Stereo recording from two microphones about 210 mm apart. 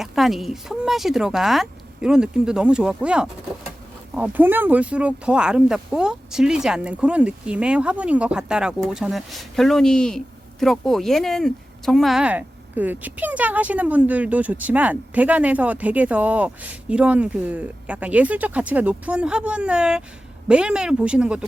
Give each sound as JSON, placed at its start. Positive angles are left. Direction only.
{"t": 0.0, "sound": "speech", "side_deg": 0}